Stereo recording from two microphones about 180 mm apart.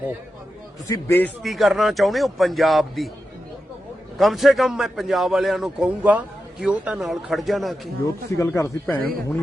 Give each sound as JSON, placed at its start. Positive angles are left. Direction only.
{"t": 0.9, "sound": "speech", "side_deg": 10}
{"t": 1.4, "sound": "a man's voice", "side_deg": 0}
{"t": 4.2, "sound": "a man's voice", "side_deg": 0}
{"t": 8.0, "sound": "speech", "side_deg": 15}
{"t": 9.0, "sound": "speech", "side_deg": -55}